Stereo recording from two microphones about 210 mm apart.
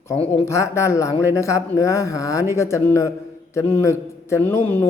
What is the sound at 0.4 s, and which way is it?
A man's voice, 15° left (ahead or behind).